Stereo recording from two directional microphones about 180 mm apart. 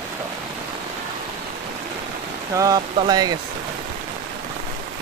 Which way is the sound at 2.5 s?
20° right (ahead or behind).